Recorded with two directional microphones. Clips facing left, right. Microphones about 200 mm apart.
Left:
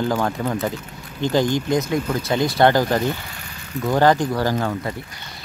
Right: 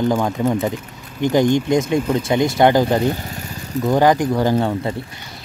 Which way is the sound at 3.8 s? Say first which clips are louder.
Right 2 dB; 15° right (ahead or behind).